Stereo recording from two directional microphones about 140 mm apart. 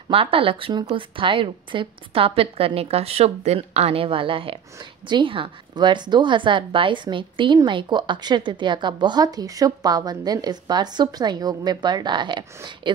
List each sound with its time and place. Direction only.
0.1 s speech: 40° right (ahead or behind)